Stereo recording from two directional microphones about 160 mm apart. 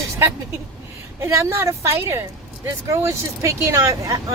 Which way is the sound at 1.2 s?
15° right (ahead or behind).